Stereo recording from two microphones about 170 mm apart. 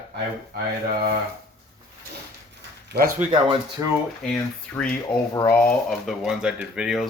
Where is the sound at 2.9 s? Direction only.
80° right.